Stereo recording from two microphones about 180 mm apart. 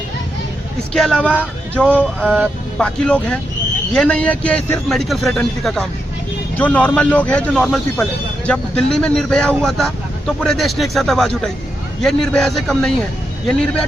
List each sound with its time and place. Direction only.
0.9 s a man's voice: 5° left (ahead or behind)